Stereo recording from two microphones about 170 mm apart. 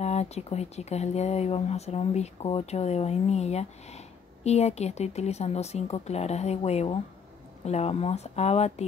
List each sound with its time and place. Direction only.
0.0 s speech: 40° left (ahead or behind)